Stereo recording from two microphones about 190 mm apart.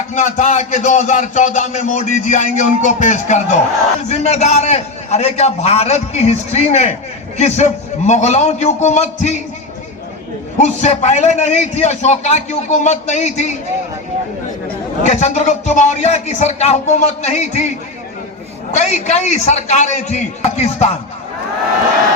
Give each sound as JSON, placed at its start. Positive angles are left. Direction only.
{"t": 0.1, "sound": "a man's voice", "side_deg": 40}
{"t": 10.6, "sound": "a man's voice", "side_deg": 35}
{"t": 15.0, "sound": "a man's voice", "side_deg": 40}
{"t": 18.7, "sound": "a man's voice", "side_deg": 40}